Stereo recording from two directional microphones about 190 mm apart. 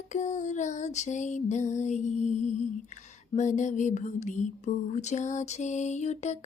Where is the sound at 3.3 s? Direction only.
40° left (ahead or behind).